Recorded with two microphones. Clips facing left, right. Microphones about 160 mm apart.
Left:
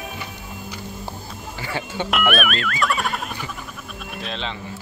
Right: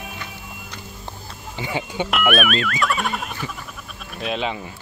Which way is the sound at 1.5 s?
15° right (ahead or behind).